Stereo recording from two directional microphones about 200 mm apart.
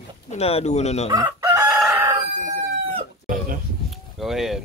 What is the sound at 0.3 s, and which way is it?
Speech, 30° left (ahead or behind).